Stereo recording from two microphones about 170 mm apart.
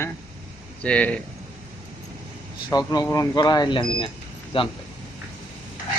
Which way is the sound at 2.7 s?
20° left (ahead or behind).